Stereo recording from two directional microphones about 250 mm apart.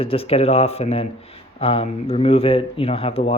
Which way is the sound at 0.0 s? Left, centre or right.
Left.